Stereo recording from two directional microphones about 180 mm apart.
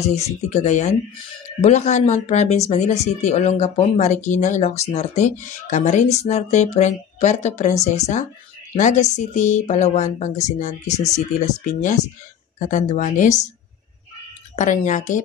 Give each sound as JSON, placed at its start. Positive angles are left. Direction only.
{"t": 0.0, "sound": "a woman's voice", "side_deg": 35}
{"t": 14.5, "sound": "a woman's voice", "side_deg": 45}